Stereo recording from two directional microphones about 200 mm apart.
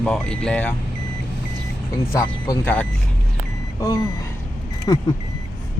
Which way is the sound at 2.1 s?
10° left (ahead or behind).